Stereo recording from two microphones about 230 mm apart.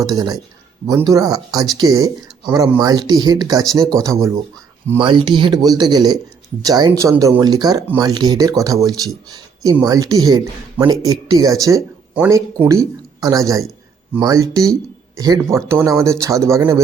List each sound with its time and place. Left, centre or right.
0.1 s speech: centre